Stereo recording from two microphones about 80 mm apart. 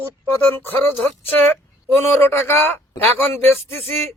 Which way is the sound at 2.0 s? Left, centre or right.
Left.